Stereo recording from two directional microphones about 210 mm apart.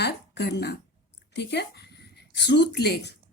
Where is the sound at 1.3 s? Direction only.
50° left (ahead or behind).